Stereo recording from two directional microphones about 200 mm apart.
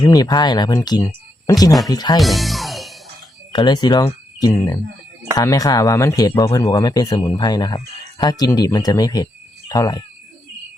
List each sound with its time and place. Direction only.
0.0 s speech: 20° left (ahead or behind)
2.1 s music: centre (ahead or behind)
3.5 s speech: 20° left (ahead or behind)